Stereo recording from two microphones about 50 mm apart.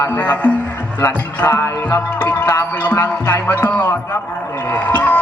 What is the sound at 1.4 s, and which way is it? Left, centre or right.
Speech, left.